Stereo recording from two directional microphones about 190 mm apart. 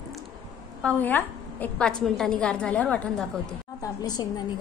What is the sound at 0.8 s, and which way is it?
A woman's voice, 10° left (ahead or behind).